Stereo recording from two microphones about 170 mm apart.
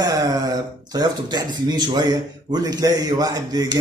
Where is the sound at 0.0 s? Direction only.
20° right (ahead or behind).